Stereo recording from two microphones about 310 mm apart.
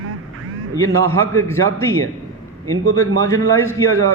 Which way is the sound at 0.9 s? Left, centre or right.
Centre.